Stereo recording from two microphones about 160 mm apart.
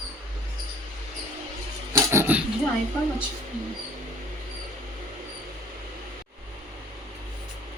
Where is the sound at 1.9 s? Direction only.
15° right (ahead or behind).